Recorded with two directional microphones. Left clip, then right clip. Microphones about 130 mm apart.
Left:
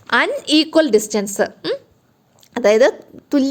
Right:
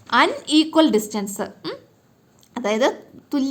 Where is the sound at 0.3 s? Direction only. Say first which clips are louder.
Left 3 dB; 55° left (ahead or behind).